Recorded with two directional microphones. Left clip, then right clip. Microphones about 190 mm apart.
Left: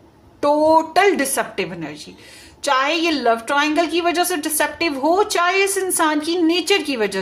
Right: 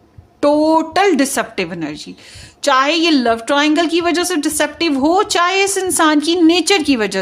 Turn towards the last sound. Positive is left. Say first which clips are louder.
# right 4 dB
turn(degrees=-50)  # may be behind; listen again after turning